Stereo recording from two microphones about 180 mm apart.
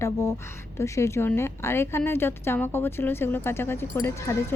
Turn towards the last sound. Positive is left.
turn(degrees=15)  # may be behind; listen again after turning